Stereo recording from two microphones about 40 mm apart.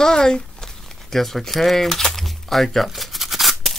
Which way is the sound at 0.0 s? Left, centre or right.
Centre.